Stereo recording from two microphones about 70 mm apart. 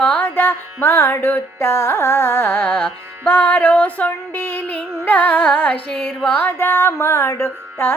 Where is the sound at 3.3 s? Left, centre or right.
Left.